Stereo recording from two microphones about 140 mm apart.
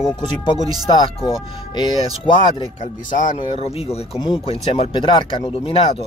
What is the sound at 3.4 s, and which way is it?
Speech, 45° left (ahead or behind).